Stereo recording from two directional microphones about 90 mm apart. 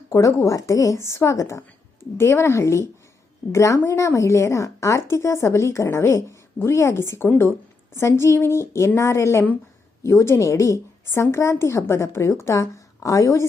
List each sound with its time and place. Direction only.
0.1 s a woman's voice: 40° left (ahead or behind)